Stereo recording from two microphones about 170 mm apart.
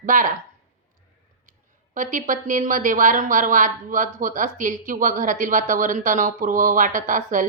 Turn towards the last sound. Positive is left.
turn(degrees=-50)  # may be behind; listen again after turning